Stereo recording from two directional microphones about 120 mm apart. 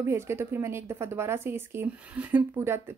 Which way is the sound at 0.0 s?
20° right (ahead or behind).